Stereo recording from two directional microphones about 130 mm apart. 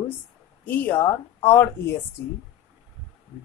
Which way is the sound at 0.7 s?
15° left (ahead or behind).